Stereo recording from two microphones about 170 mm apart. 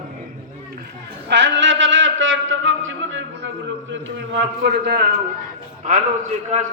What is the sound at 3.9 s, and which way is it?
A man's voice, 90° right.